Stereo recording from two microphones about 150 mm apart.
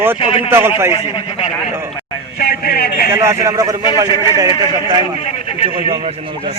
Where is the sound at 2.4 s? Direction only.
90° left.